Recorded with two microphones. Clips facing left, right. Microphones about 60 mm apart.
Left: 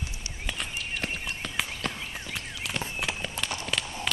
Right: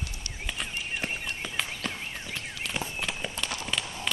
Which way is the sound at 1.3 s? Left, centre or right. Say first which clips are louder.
Left 1 dB; centre.